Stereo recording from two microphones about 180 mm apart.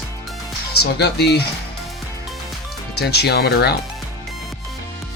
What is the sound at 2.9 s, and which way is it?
Speech, 65° left (ahead or behind).